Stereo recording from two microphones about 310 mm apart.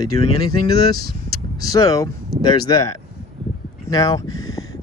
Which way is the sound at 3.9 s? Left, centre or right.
Centre.